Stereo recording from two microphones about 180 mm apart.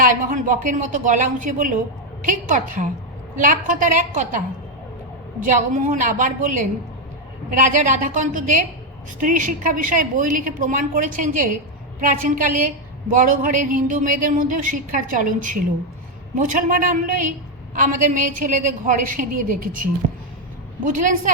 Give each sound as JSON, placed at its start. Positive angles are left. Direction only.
{"t": 0.0, "sound": "a woman's voice", "side_deg": -45}
{"t": 5.5, "sound": "a woman's voice", "side_deg": -45}